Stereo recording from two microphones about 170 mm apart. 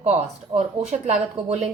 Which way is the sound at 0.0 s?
40° right (ahead or behind).